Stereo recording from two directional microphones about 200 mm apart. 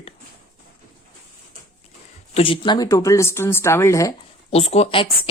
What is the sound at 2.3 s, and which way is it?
Speech, 25° left (ahead or behind).